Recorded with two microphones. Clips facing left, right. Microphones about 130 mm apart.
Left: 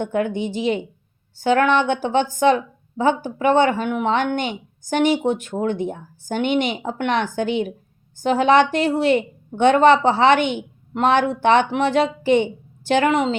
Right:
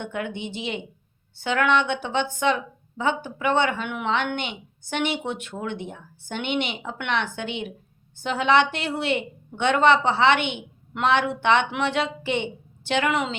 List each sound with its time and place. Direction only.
0.0 s speech: 40° left (ahead or behind)